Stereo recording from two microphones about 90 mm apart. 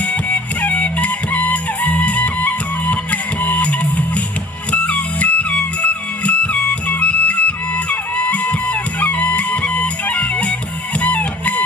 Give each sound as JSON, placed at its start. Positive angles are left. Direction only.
{"t": 0.0, "sound": "music", "side_deg": 15}